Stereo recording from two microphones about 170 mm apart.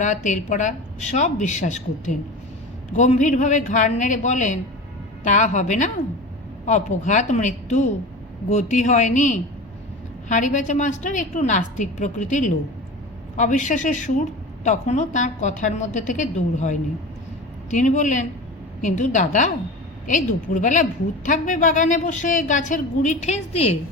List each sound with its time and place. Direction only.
0.0 s speech: 45° left (ahead or behind)